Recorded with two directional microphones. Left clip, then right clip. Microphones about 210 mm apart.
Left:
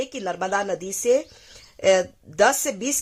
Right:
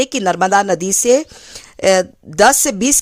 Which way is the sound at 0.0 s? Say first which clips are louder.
Right 12 dB; 35° right (ahead or behind).